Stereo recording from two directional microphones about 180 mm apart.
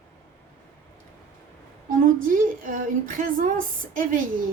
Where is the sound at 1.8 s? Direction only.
50° right (ahead or behind).